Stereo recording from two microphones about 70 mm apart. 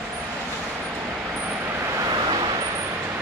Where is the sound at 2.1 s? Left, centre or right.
Right.